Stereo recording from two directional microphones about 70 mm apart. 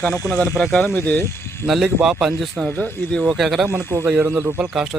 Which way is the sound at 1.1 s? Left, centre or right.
Left.